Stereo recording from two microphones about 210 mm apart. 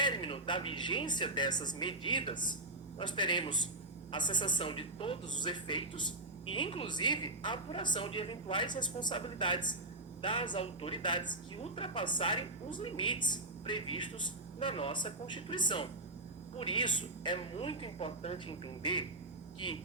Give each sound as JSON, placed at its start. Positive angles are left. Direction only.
{"t": 0.0, "sound": "a woman's voice", "side_deg": 20}